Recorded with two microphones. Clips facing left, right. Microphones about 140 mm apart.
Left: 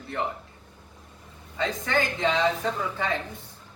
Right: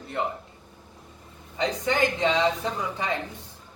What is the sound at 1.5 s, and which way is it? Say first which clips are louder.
A woman's voice: right 1 dB; 15° right (ahead or behind).